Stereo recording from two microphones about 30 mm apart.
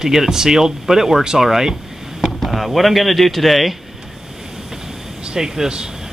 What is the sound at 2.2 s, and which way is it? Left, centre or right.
Speech, centre.